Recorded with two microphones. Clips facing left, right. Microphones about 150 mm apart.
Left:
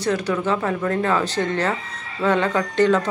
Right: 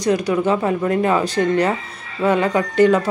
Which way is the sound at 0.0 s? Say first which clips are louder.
Right 4 dB; 15° right (ahead or behind).